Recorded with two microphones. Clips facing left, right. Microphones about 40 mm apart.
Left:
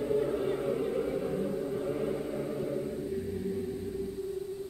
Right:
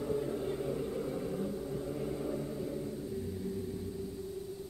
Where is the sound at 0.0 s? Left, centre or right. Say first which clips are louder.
Left 5 dB; left.